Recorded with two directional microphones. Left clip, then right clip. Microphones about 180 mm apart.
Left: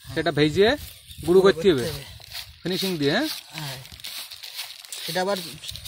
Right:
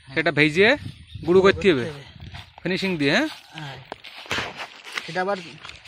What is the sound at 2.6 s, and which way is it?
Speech, 15° right (ahead or behind).